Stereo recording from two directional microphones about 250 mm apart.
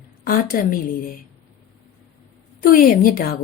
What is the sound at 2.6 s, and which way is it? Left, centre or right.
Speech, left.